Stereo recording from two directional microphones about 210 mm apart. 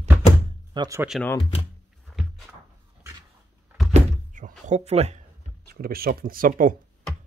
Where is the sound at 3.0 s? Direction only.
15° right (ahead or behind).